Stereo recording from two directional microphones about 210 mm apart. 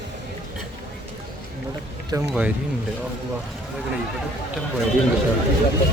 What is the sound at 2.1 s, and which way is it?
Speech, 15° right (ahead or behind).